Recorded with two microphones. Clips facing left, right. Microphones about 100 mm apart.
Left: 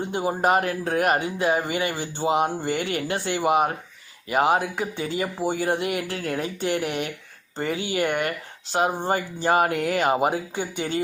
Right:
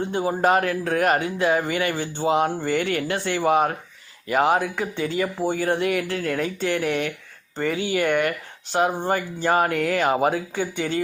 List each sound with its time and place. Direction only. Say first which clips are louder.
0.1 s speech: right 1 dB; 15° left (ahead or behind)
2.2 s speech: right 1 dB; 15° left (ahead or behind)
2.8 s speech: right 2 dB; 25° left (ahead or behind)
8.7 s speech: right 1 dB; 20° left (ahead or behind)